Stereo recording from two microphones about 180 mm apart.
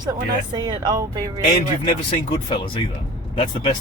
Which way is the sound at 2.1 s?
30° left (ahead or behind).